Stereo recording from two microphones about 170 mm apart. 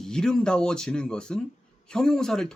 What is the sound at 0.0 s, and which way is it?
Speech, 5° left (ahead or behind).